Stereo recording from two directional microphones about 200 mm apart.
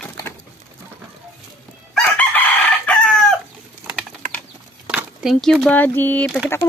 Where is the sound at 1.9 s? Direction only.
10° left (ahead or behind).